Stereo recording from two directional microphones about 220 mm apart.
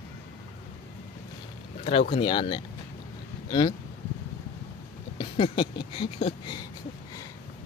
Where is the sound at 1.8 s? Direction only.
25° left (ahead or behind).